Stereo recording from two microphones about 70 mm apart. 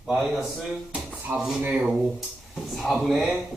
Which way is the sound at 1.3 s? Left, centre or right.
Right.